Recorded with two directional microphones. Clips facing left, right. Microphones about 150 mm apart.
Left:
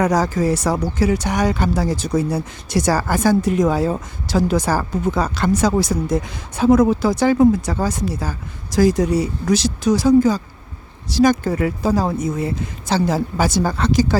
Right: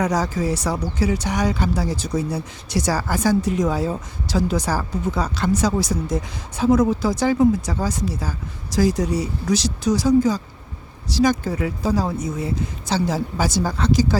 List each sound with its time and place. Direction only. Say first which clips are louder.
0.0 s speech: left 4 dB; 50° left (ahead or behind)
6.7 s speech: left 3 dB; 60° left (ahead or behind)